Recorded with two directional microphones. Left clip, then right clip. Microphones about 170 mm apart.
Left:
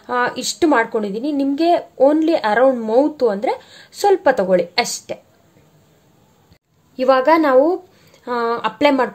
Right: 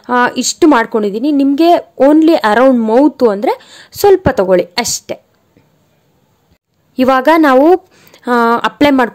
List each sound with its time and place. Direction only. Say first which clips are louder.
0.0 s speech: right 7 dB; 35° right (ahead or behind)
7.0 s speech: right 5 dB; 50° right (ahead or behind)